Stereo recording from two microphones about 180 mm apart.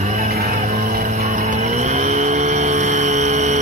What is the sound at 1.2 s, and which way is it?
Vehicle, 40° right (ahead or behind).